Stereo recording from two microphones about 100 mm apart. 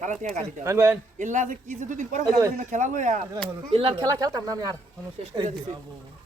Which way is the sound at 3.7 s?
65° right (ahead or behind).